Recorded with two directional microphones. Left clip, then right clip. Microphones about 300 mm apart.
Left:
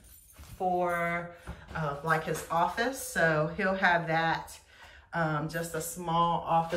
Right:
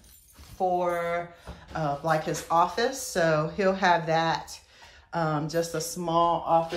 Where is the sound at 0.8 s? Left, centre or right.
Centre.